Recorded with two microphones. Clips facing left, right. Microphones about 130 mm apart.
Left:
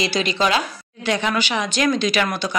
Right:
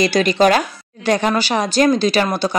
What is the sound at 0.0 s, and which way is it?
Speech, 45° right (ahead or behind).